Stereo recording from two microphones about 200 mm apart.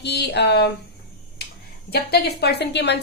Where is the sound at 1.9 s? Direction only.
50° left (ahead or behind).